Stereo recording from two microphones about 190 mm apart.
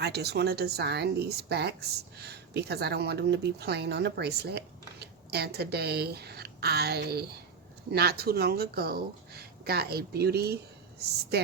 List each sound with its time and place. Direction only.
0.0 s speech: 60° right (ahead or behind)